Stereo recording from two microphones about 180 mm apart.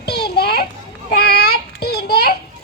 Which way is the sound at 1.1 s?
60° left (ahead or behind).